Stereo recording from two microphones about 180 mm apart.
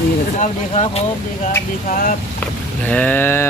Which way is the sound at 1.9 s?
45° left (ahead or behind).